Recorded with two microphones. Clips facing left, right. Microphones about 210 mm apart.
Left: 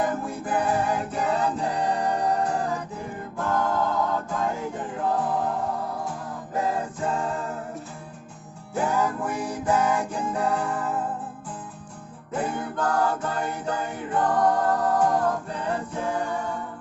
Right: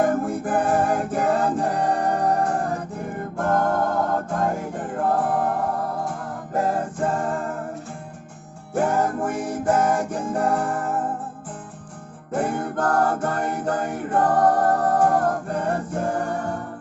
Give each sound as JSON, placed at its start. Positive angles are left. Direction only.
{"t": 0.0, "sound": "music", "side_deg": -50}
{"t": 8.7, "sound": "music", "side_deg": -55}
{"t": 12.3, "sound": "music", "side_deg": -50}